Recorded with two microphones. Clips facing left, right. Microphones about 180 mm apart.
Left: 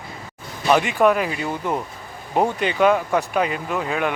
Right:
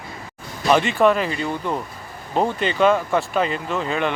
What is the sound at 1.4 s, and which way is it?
Speech, 20° left (ahead or behind).